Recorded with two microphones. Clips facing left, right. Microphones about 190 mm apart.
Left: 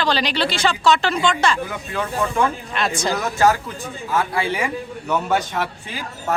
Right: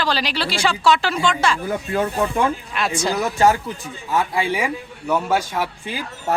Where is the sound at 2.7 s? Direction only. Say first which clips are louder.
Left 1 dB; 10° right (ahead or behind).